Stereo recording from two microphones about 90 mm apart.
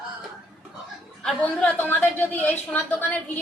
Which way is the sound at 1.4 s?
15° left (ahead or behind).